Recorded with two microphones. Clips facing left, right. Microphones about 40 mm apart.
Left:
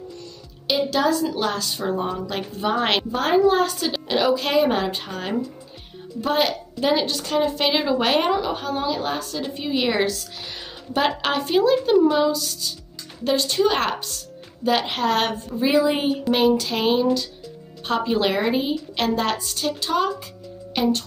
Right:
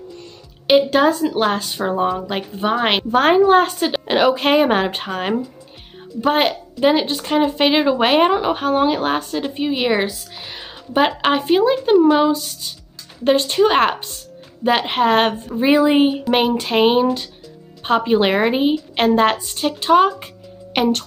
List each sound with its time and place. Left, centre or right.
0.7 s speech: right
3.1 s speech: right
9.5 s speech: right
20.7 s speech: right